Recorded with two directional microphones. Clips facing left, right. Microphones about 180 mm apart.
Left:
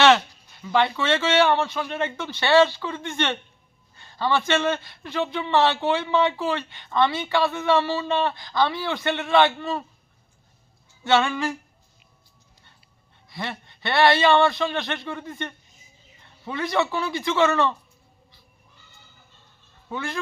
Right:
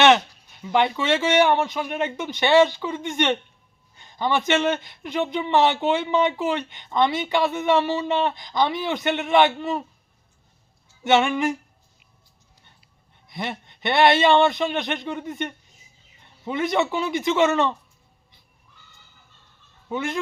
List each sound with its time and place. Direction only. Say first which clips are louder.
0.0 s a man's voice: right 1 dB; 20° right (ahead or behind)
11.0 s a man's voice: right 2 dB; 20° right (ahead or behind)
13.2 s a man's voice: right 2 dB; 20° right (ahead or behind)
19.9 s a man's voice: right 4 dB; 20° right (ahead or behind)